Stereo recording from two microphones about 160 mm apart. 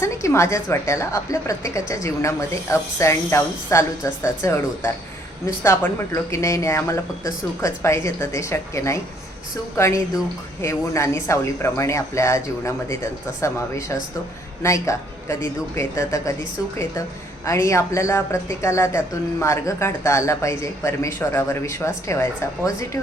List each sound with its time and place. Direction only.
0.0 s speech: 15° left (ahead or behind)
6.3 s speech: 20° left (ahead or behind)
17.4 s speech: 20° left (ahead or behind)